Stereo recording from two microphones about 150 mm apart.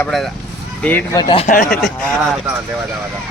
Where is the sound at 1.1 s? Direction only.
25° left (ahead or behind).